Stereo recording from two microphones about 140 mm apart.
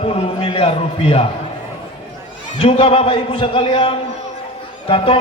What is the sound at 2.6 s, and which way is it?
A man's voice, 40° left (ahead or behind).